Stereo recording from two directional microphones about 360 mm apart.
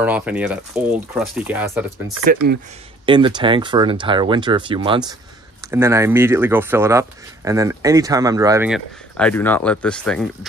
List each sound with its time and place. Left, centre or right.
0.0 s speech: centre
2.2 s speech: right
3.1 s speech: centre